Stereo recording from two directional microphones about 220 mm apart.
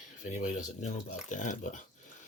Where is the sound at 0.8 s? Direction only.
35° left (ahead or behind).